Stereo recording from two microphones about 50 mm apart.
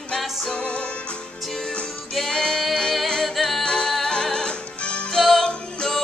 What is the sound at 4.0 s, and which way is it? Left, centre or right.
Music, centre.